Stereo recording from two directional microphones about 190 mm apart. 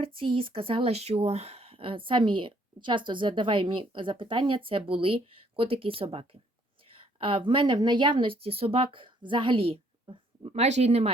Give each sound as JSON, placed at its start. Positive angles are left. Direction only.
{"t": 0.0, "sound": "speech", "side_deg": -30}